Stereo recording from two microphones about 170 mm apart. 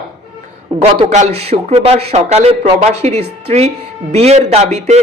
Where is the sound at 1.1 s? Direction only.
40° right (ahead or behind).